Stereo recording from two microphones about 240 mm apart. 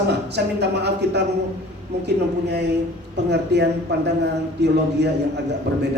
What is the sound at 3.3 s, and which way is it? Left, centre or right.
Speech, right.